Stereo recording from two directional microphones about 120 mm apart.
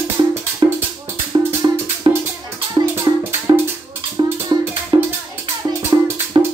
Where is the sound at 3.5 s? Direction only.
40° right (ahead or behind).